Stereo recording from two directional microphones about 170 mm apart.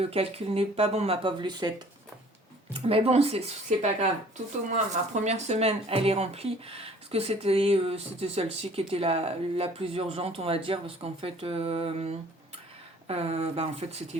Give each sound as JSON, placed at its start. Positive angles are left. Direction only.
{"t": 0.0, "sound": "speech", "side_deg": -35}
{"t": 2.7, "sound": "speech", "side_deg": -35}